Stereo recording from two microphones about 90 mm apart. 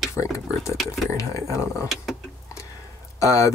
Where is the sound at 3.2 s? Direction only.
35° left (ahead or behind).